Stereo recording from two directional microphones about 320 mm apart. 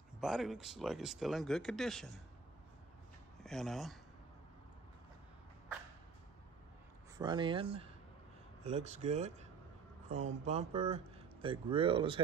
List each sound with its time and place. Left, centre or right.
0.2 s speech: centre
3.4 s speech: centre
7.2 s speech: centre